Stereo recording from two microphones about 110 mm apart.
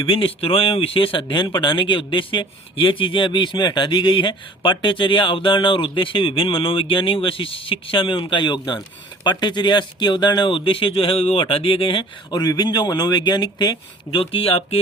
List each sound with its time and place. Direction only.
0.0 s speech: 55° left (ahead or behind)